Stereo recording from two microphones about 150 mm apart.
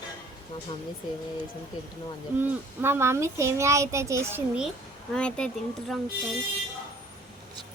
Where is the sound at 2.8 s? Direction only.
15° right (ahead or behind).